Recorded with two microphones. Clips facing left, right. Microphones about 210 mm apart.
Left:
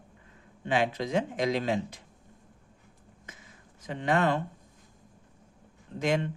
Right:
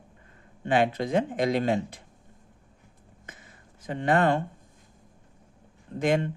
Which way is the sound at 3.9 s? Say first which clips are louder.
Right 3 dB; 50° right (ahead or behind).